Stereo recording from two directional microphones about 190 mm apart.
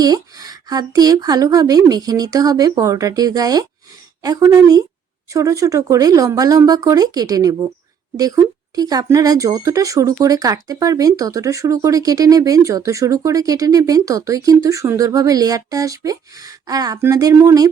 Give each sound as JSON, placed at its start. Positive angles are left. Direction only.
{"t": 0.0, "sound": "speech", "side_deg": -20}